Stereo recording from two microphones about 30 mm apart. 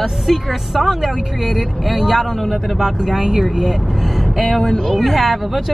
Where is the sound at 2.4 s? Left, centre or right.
Centre.